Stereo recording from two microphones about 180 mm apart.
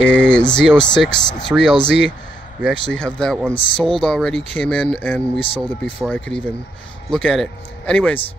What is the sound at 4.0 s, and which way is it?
Speech, 5° left (ahead or behind).